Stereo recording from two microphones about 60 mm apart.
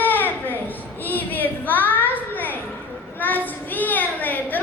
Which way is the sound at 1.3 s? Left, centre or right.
Left.